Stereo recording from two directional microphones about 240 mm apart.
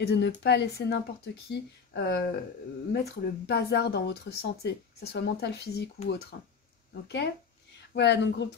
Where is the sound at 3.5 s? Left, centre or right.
Left.